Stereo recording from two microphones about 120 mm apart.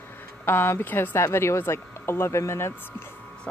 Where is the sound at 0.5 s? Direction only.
20° left (ahead or behind).